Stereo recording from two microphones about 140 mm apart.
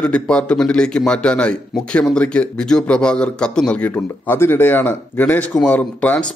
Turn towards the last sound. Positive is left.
turn(degrees=10)  # may be behind; listen again after turning